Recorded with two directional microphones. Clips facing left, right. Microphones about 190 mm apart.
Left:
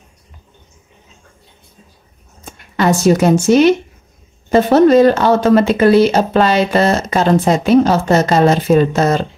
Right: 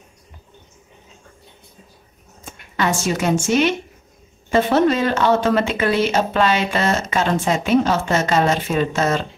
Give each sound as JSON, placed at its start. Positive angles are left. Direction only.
{"t": 2.7, "sound": "speech", "side_deg": 35}